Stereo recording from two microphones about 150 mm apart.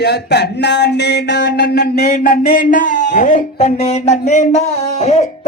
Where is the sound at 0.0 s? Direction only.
90° left; by 3.7 s 60° left (ahead or behind).